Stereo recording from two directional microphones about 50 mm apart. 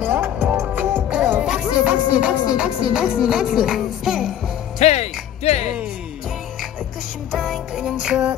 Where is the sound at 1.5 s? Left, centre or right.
Right; by 4.3 s centre.